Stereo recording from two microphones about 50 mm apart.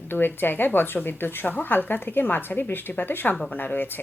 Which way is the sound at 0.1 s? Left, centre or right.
Left.